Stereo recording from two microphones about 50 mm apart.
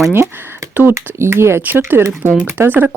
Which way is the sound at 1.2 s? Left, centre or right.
Right.